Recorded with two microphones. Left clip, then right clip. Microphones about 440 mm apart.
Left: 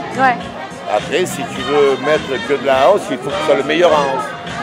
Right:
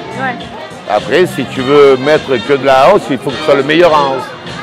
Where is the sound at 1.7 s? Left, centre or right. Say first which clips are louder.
Right 7 dB; right.